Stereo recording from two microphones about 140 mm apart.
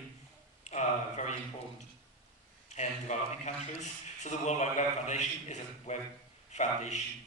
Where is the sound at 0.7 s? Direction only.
55° left (ahead or behind).